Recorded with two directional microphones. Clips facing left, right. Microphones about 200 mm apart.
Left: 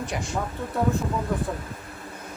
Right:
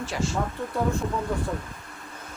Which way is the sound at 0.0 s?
15° left (ahead or behind).